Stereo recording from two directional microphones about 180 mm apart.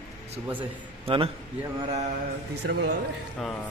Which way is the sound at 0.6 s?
30° right (ahead or behind).